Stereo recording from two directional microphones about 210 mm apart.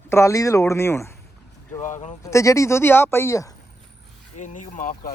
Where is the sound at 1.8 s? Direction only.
35° left (ahead or behind).